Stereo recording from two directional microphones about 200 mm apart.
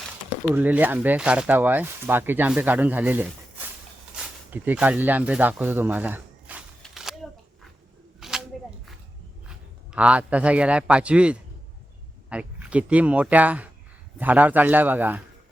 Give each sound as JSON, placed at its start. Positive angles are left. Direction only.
{"t": 0.5, "sound": "speech", "side_deg": -10}
{"t": 6.8, "sound": "a sound", "side_deg": 0}
{"t": 8.2, "sound": "single-lens reflex camera", "side_deg": 0}
{"t": 9.9, "sound": "a man's voice", "side_deg": -5}